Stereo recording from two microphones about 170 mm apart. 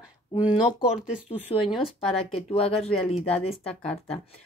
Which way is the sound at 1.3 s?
30° left (ahead or behind).